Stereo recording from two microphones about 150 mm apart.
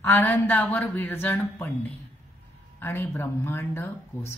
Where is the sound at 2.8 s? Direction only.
15° left (ahead or behind).